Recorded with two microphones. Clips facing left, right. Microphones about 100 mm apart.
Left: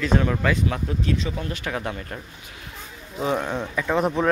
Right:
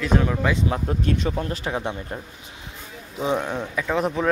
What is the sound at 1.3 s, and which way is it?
Speech, 35° right (ahead or behind).